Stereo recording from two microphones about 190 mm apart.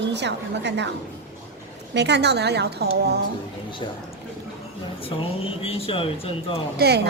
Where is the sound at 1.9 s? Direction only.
65° right (ahead or behind).